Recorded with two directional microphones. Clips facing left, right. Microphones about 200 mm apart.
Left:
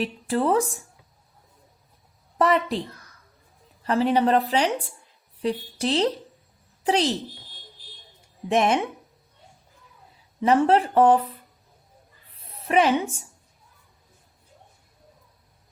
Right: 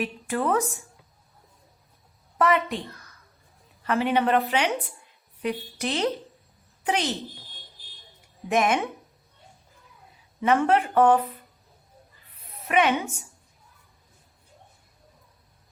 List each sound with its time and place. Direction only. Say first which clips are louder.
0.0 s a woman's voice: left 3 dB; 30° left (ahead or behind)
2.4 s a woman's voice: left 2 dB; 35° left (ahead or behind)
3.8 s a woman's voice: left 3 dB; 35° left (ahead or behind)
8.4 s speech: left 2 dB; 30° left (ahead or behind)
10.4 s a woman's voice: left 2 dB; 35° left (ahead or behind)
12.6 s a woman's voice: left 2 dB; 30° left (ahead or behind)